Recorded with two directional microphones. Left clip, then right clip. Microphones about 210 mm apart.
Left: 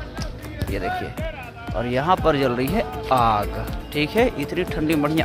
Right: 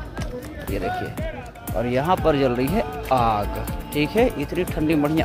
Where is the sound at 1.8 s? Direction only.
Centre (ahead or behind).